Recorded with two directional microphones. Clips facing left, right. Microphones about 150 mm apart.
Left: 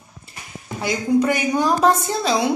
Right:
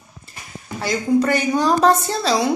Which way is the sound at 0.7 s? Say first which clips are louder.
Right 1 dB; 10° left (ahead or behind).